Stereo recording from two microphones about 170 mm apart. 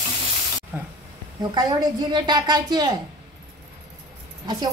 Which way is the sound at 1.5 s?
25° right (ahead or behind).